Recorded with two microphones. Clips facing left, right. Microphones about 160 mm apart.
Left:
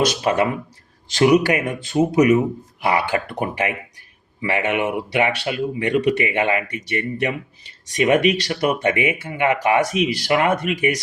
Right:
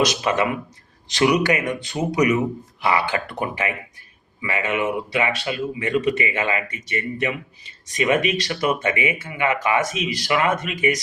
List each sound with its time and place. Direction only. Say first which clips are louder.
0.0 s speech: left 2 dB; 55° left (ahead or behind)
4.4 s speech: left 2 dB; 65° left (ahead or behind)